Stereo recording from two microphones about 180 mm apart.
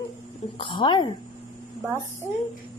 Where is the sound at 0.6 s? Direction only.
25° left (ahead or behind).